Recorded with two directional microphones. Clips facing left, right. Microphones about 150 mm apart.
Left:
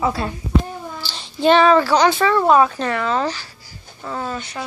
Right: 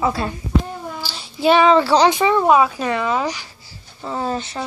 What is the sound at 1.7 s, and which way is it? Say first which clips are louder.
Speech: right 1 dB; 30° right (ahead or behind).